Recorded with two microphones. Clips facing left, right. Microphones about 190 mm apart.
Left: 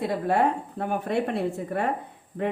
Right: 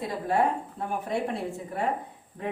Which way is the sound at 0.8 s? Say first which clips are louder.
Left 4 dB; 65° left (ahead or behind).